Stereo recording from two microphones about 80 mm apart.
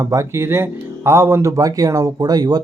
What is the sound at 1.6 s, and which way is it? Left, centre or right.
Speech, right.